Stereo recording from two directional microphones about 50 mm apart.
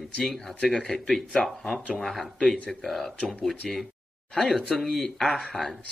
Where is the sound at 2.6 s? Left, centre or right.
Centre.